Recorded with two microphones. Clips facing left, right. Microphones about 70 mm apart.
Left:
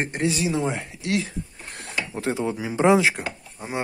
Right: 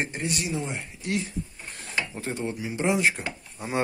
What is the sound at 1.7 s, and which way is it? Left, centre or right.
Mechanisms, left.